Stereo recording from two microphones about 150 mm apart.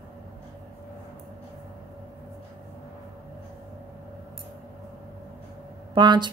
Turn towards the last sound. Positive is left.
turn(degrees=-30)  # may be behind; listen again after turning